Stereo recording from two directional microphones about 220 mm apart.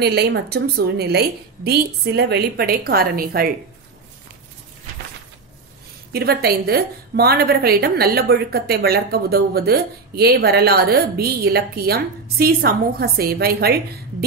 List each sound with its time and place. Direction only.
0.0 s a woman's voice: 50° right (ahead or behind)
6.1 s a woman's voice: 45° right (ahead or behind)